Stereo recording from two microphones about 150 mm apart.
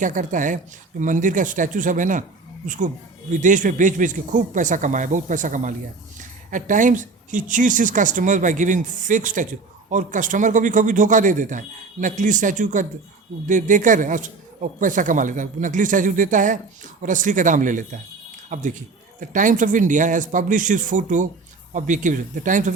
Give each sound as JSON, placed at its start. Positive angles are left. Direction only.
{"t": 0.0, "sound": "speech", "side_deg": -60}